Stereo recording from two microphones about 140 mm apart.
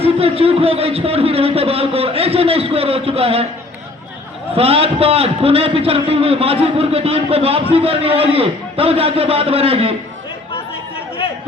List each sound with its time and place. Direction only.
0.0 s a man's voice: 45° right (ahead or behind)
4.5 s a man's voice: 45° right (ahead or behind)